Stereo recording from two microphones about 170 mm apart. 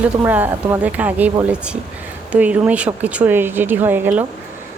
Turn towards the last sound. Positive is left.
turn(degrees=-10)  # may be behind; listen again after turning